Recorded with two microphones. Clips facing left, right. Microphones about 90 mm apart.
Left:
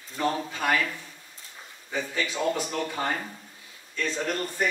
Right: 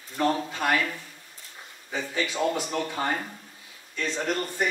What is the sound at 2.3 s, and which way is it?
Speech, 5° right (ahead or behind).